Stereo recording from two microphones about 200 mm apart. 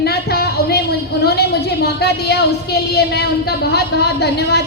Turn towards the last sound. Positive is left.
turn(degrees=55)  # may be behind; listen again after turning